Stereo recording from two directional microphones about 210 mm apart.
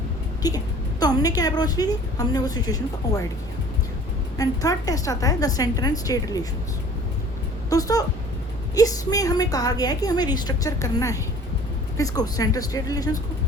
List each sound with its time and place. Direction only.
0.4 s a woman's voice: 20° left (ahead or behind)
4.4 s a woman's voice: 15° left (ahead or behind)
7.7 s a woman's voice: 15° left (ahead or behind)